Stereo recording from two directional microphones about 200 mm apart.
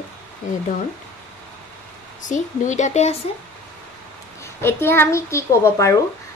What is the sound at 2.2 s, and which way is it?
Speech, 40° left (ahead or behind).